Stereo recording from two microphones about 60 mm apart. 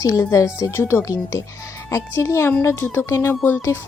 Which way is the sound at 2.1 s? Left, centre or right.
Left.